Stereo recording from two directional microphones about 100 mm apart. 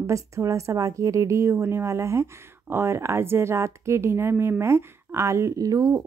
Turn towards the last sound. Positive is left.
turn(degrees=-35)  # may be behind; listen again after turning